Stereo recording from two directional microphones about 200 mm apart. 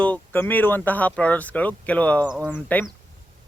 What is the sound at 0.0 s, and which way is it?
Speech, 10° left (ahead or behind).